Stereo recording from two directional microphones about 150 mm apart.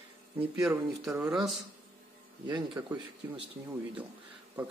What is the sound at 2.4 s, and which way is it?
Speech, 30° right (ahead or behind).